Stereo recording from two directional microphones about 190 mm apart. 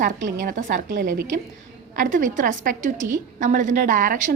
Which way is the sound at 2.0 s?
45° right (ahead or behind).